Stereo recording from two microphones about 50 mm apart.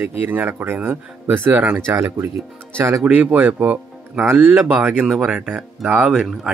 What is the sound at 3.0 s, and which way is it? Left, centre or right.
Speech, right.